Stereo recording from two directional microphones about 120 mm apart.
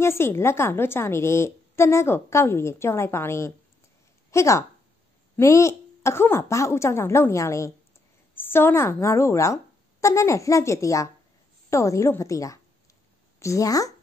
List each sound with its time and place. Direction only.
0.0 s a woman's voice: 20° left (ahead or behind)